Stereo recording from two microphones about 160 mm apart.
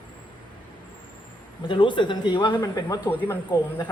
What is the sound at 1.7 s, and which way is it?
Speech, 30° left (ahead or behind).